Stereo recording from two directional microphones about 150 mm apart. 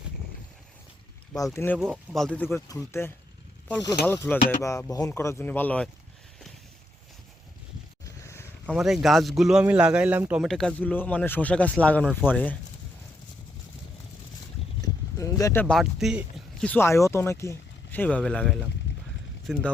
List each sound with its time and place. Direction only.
1.5 s speech: 15° left (ahead or behind)
1.8 s speech: centre (ahead or behind)
8.0 s boat: 20° left (ahead or behind)
8.6 s a man's voice: 5° right (ahead or behind)
10.4 s speech: 5° left (ahead or behind)
14.8 s boat: 20° left (ahead or behind)
15.6 s speech: centre (ahead or behind)
16.6 s speech: 15° left (ahead or behind)